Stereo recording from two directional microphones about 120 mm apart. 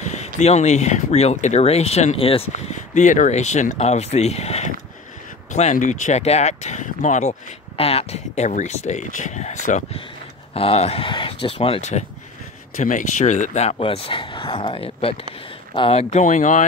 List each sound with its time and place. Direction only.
0.0 s speech: 70° left (ahead or behind); by 2.4 s 50° left (ahead or behind)
2.5 s speech: 85° left; by 4.6 s 65° left (ahead or behind)
5.5 s speech: 80° left
10.5 s speech: 55° left (ahead or behind)
12.8 s speech: 85° left